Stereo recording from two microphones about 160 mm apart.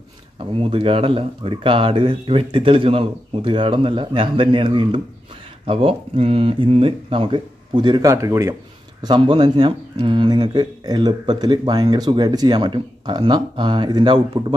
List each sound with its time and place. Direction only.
0.4 s speech: 35° right (ahead or behind)
9.0 s speech: 30° right (ahead or behind)